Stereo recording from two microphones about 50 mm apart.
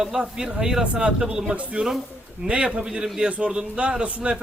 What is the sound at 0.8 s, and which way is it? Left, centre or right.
A man's voice, right.